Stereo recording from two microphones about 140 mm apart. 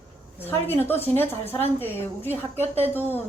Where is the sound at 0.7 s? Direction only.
15° left (ahead or behind).